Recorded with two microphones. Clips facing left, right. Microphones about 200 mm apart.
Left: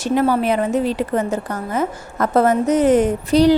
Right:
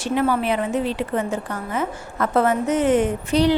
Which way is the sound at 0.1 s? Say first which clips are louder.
Left 4 dB; 40° left (ahead or behind).